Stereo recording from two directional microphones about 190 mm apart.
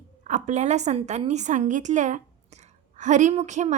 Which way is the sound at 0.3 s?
40° right (ahead or behind).